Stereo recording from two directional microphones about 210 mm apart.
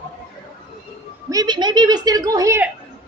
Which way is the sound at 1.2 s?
20° right (ahead or behind).